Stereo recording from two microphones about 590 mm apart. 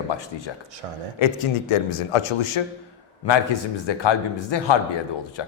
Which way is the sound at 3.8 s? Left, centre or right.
Left.